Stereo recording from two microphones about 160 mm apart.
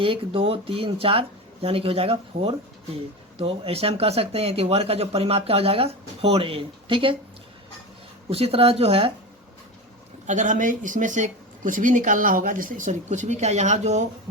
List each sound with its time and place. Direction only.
0.0 s speech: 35° right (ahead or behind)
8.3 s speech: 40° right (ahead or behind)
10.2 s speech: 50° right (ahead or behind)